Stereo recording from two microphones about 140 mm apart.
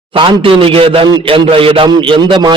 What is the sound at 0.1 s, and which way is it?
A man's voice, 40° right (ahead or behind).